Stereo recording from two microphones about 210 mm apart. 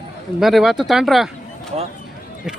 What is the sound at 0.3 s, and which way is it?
Speech, centre (ahead or behind).